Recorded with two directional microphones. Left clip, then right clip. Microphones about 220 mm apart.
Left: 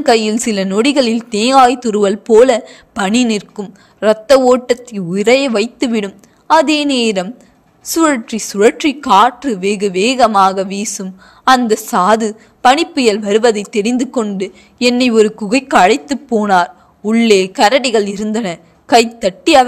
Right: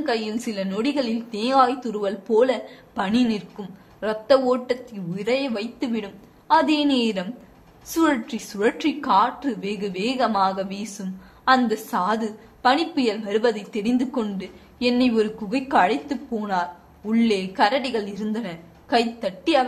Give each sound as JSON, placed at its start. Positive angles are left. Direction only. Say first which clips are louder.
{"t": 0.0, "sound": "a woman's voice", "louder": "left 13 dB", "side_deg": 35}